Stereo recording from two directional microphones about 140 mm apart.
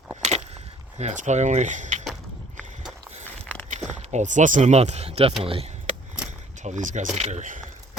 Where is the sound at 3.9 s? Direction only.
55° right (ahead or behind).